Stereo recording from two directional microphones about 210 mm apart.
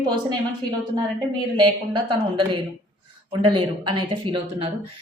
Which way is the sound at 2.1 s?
25° right (ahead or behind).